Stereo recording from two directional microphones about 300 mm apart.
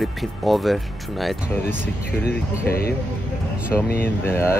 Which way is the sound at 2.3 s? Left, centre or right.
Left.